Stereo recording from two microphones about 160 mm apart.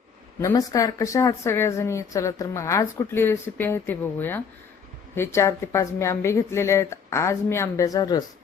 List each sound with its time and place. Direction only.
0.3 s a woman's voice: 20° left (ahead or behind)